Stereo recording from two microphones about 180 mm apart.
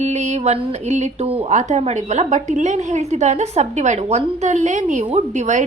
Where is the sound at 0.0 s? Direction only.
40° right (ahead or behind).